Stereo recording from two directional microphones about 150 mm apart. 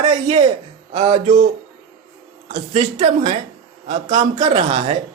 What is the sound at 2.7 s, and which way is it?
A woman's voice, 55° right (ahead or behind).